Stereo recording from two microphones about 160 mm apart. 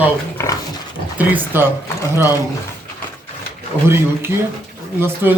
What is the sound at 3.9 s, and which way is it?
A man's voice, 15° right (ahead or behind).